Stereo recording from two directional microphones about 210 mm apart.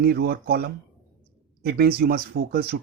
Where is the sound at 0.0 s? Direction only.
45° right (ahead or behind).